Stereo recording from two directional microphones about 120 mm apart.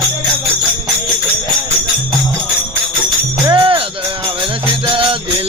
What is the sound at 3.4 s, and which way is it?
Jingle bell, 45° right (ahead or behind).